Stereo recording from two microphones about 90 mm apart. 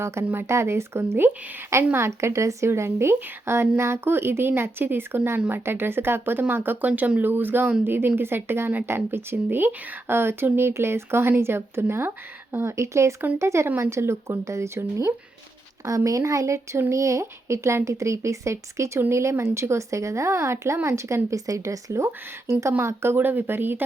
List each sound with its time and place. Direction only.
0.0 s speech: 30° right (ahead or behind)